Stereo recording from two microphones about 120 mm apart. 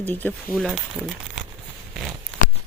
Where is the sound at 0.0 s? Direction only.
15° left (ahead or behind).